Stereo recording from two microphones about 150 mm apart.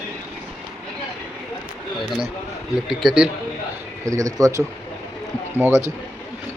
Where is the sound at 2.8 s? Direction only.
5° right (ahead or behind).